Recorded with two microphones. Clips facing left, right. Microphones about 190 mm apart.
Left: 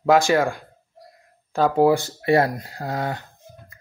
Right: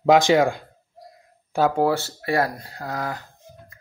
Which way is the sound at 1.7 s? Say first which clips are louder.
Left 4 dB; 10° left (ahead or behind).